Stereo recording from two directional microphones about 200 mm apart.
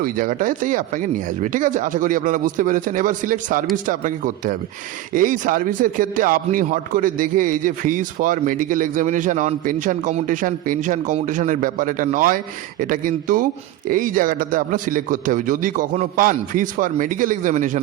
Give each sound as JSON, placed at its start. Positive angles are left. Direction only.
{"t": 0.0, "sound": "a man's voice", "side_deg": -45}